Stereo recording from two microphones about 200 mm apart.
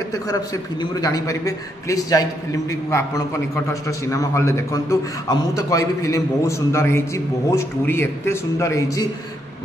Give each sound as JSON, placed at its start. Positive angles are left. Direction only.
{"t": 1.0, "sound": "a man's voice", "side_deg": 15}